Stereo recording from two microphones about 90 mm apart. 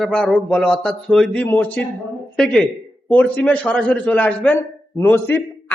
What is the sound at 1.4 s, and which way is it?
Speech, 20° left (ahead or behind).